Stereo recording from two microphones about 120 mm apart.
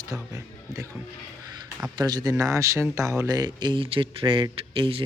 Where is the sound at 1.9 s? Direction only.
35° right (ahead or behind).